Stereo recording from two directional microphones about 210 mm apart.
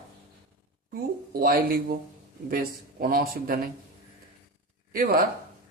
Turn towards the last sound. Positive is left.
turn(degrees=-45)  # may be behind; listen again after turning